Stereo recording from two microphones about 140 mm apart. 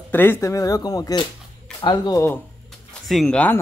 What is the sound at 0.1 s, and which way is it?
Speech, 15° left (ahead or behind).